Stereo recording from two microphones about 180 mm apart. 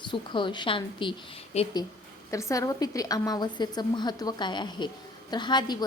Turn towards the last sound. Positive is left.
turn(degrees=25)  # may be behind; listen again after turning